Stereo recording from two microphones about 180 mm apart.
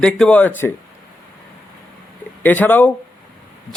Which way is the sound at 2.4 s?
10° left (ahead or behind).